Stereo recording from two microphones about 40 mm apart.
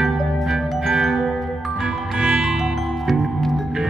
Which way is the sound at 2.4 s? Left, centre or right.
Centre.